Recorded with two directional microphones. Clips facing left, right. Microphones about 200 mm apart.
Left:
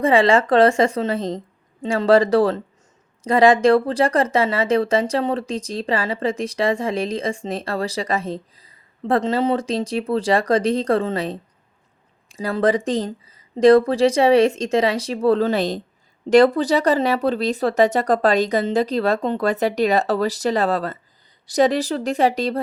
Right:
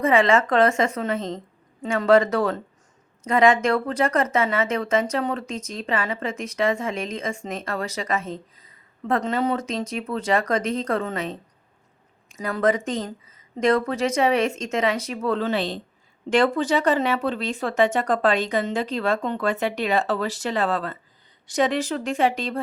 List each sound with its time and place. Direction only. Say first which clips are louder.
0.0 s speech: left 3 dB; 30° left (ahead or behind)